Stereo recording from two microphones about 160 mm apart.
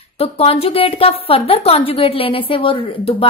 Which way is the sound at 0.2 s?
40° left (ahead or behind).